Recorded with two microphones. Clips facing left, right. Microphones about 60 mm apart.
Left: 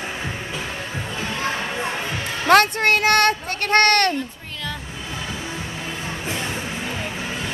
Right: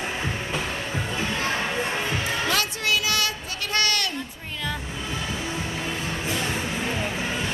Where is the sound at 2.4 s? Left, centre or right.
Left.